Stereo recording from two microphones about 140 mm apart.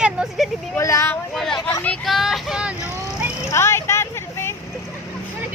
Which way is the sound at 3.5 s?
20° left (ahead or behind).